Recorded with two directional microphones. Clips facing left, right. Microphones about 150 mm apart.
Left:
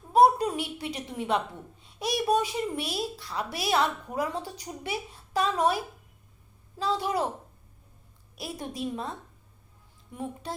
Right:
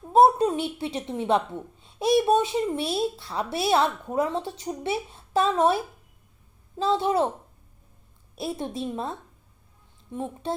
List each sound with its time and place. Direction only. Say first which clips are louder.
0.1 s a sound: right 3 dB; 25° right (ahead or behind)
1.8 s a child's voice: right 9 dB; 25° right (ahead or behind)
8.4 s a child's voice: right 5 dB; 25° right (ahead or behind)